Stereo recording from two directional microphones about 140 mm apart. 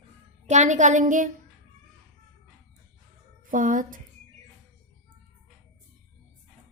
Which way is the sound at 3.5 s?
70° right (ahead or behind).